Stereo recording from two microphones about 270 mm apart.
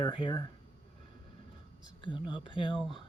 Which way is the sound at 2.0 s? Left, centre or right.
Centre.